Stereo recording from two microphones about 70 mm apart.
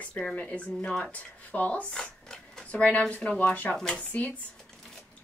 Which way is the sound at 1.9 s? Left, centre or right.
Centre.